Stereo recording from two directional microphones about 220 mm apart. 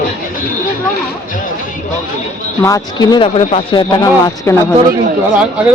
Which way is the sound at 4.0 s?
15° left (ahead or behind).